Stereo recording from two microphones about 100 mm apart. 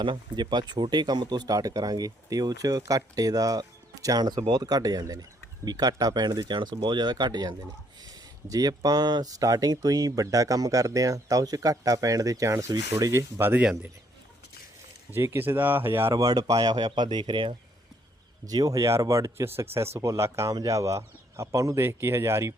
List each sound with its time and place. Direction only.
0.0 s speech: 50° right (ahead or behind); by 13.7 s 20° right (ahead or behind)
15.1 s speech: 25° right (ahead or behind)
16.1 s speech: 40° right (ahead or behind)
18.4 s speech: 40° right (ahead or behind)